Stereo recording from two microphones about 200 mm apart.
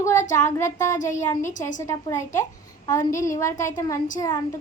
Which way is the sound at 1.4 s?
40° left (ahead or behind).